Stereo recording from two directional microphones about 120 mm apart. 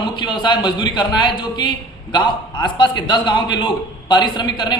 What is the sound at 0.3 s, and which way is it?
A man's voice, 40° left (ahead or behind).